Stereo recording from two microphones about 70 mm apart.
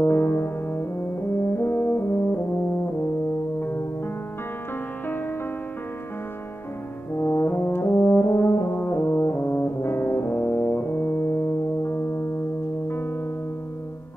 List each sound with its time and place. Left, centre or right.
0.0 s music: left
1.4 s brass instrument: left
7.2 s brass instrument: left
12.8 s music: left